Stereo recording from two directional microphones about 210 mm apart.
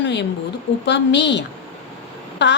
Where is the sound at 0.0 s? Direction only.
55° left (ahead or behind).